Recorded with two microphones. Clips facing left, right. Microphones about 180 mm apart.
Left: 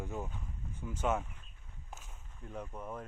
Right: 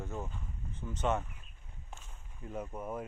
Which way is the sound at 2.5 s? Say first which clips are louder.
Right 4 dB; 10° right (ahead or behind).